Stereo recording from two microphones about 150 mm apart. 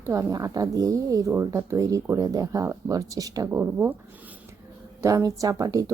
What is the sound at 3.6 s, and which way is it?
Speech, 10° right (ahead or behind).